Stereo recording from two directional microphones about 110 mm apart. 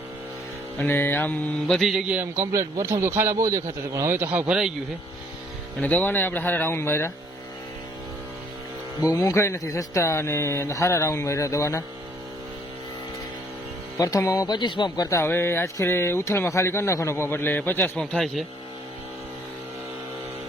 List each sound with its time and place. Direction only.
0.8 s speech: 20° left (ahead or behind)
1.6 s speech: 5° left (ahead or behind)
2.1 s a man's voice: 20° right (ahead or behind)
5.8 s speech: 15° left (ahead or behind)
9.1 s speech: 25° left (ahead or behind)
14.0 s speech: 30° left (ahead or behind)
15.2 s speech: 20° left (ahead or behind)
17.9 s speech: 5° left (ahead or behind)